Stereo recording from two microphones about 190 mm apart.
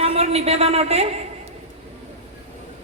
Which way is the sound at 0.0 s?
30° right (ahead or behind).